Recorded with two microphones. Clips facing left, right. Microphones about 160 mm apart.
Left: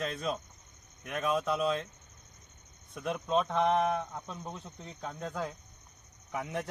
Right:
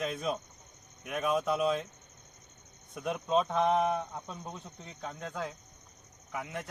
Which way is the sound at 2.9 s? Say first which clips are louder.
Right 1 dB; centre (ahead or behind).